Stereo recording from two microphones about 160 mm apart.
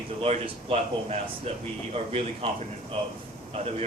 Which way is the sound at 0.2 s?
35° right (ahead or behind).